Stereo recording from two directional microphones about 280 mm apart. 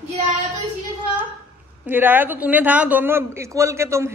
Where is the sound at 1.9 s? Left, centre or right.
Centre.